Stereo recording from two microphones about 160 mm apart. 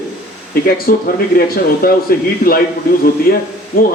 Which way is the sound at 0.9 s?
65° left (ahead or behind).